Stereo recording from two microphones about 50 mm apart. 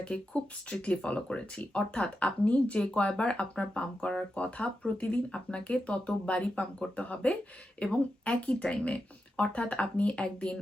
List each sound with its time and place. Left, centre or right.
0.1 s speech: centre